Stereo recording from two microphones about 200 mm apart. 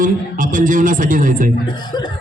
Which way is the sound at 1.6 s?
20° left (ahead or behind).